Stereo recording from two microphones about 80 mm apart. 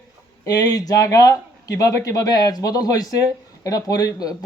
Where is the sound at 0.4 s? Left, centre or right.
Left.